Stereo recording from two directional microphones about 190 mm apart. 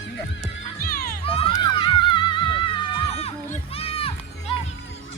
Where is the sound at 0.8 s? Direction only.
50° left (ahead or behind).